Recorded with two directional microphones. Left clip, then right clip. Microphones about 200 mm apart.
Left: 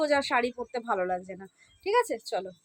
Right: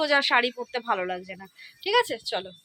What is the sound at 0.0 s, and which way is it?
Speech, 5° left (ahead or behind).